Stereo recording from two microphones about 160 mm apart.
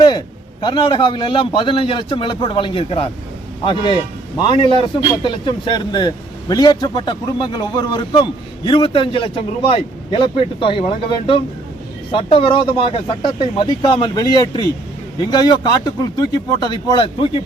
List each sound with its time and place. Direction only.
0.6 s speech: 30° left (ahead or behind)